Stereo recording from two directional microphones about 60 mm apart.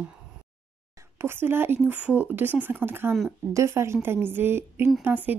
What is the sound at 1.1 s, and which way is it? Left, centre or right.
Speech, right.